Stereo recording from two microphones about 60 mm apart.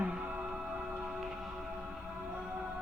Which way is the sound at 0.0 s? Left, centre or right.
Right.